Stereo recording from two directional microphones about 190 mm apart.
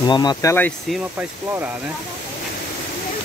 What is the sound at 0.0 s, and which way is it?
Speech, 20° left (ahead or behind).